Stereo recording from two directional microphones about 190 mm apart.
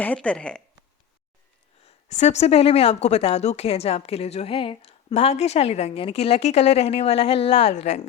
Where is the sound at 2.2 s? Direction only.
35° left (ahead or behind).